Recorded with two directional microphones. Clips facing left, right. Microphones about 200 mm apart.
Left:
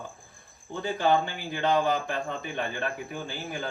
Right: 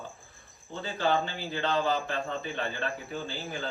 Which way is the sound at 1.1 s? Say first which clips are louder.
Left 3 dB; 15° left (ahead or behind).